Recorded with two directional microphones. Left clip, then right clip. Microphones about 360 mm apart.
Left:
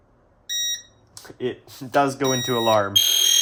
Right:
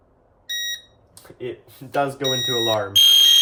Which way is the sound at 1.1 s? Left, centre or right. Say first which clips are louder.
Left 4 dB; centre.